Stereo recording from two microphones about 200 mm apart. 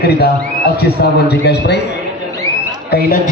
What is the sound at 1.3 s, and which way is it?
Speech, 55° left (ahead or behind).